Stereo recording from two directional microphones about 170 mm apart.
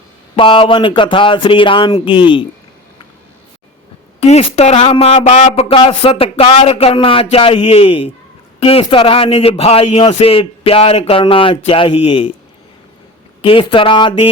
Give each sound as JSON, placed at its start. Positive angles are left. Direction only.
{"t": 0.3, "sound": "speech", "side_deg": 30}
{"t": 4.2, "sound": "a man's voice", "side_deg": 35}
{"t": 13.4, "sound": "a man's voice", "side_deg": 30}